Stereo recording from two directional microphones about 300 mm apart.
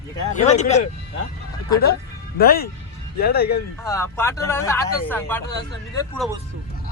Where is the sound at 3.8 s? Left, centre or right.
Centre.